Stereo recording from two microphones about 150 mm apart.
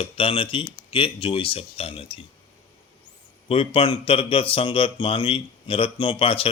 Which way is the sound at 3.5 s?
35° left (ahead or behind).